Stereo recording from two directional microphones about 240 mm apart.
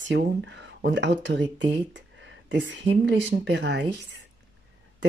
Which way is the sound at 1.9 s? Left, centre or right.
Right.